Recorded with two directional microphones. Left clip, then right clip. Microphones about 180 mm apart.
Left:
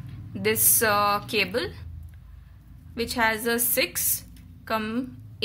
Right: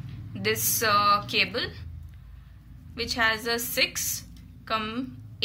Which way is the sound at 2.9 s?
55° left (ahead or behind).